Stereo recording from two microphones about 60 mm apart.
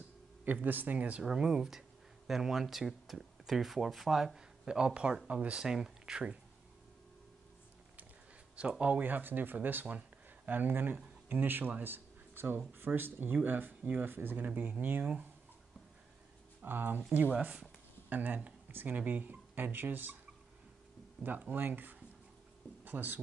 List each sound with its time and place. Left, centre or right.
0.7 s speech: right
1.2 s speech: centre
5.6 s speech: centre
8.5 s speech: centre
16.6 s speech: right
21.2 s speech: right